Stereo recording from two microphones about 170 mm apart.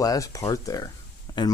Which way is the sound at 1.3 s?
20° left (ahead or behind).